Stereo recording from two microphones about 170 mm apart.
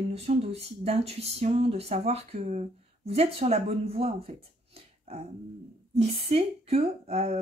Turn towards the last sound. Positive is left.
turn(degrees=-40)  # may be behind; listen again after turning